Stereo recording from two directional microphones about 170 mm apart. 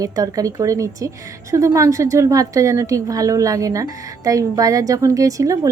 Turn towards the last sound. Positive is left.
turn(degrees=-20)  # may be behind; listen again after turning